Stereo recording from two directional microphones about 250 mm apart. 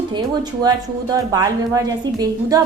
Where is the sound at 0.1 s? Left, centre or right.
Centre.